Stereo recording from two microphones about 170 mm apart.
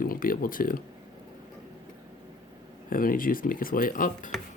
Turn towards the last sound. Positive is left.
turn(degrees=50)  # may be behind; listen again after turning